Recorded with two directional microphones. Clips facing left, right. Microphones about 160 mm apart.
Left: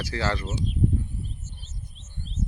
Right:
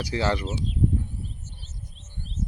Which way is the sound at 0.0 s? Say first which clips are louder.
Right 3 dB; 20° right (ahead or behind).